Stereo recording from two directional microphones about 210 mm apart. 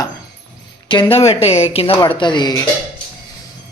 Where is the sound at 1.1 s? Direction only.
30° left (ahead or behind).